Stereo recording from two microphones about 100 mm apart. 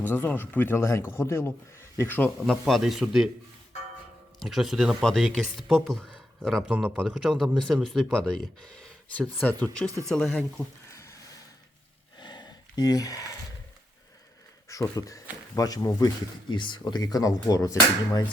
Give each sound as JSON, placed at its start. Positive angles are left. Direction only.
{"t": 0.0, "sound": "speech", "side_deg": 20}
{"t": 2.5, "sound": "speech", "side_deg": 0}
{"t": 4.4, "sound": "speech", "side_deg": 0}
{"t": 6.7, "sound": "a man's voice", "side_deg": -15}
{"t": 7.1, "sound": "speech", "side_deg": 0}
{"t": 12.2, "sound": "a sound", "side_deg": 45}
{"t": 14.7, "sound": "speech", "side_deg": 35}
{"t": 16.5, "sound": "speech", "side_deg": 55}